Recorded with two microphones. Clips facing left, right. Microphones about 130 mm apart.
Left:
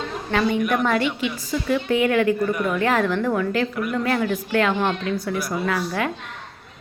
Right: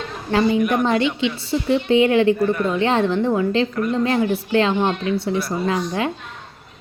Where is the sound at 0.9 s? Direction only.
25° right (ahead or behind).